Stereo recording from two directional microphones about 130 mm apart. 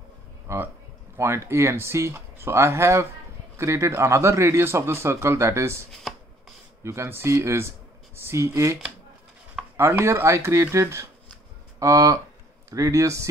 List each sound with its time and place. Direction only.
0.5 s a man's voice: 20° right (ahead or behind)
9.8 s a man's voice: 20° right (ahead or behind)